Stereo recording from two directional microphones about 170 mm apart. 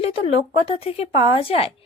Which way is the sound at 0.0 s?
35° left (ahead or behind).